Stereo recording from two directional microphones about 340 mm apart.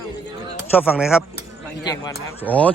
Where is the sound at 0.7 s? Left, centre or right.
Centre.